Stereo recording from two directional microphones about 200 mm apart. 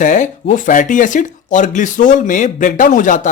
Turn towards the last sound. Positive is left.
turn(degrees=40)  # may be behind; listen again after turning